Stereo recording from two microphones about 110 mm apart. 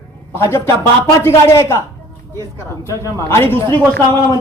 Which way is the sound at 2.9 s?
25° left (ahead or behind).